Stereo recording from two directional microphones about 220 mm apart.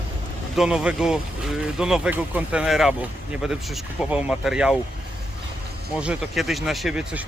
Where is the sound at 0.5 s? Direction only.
5° right (ahead or behind).